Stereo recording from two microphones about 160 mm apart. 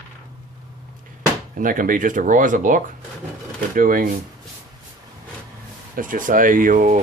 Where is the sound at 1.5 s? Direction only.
60° right (ahead or behind).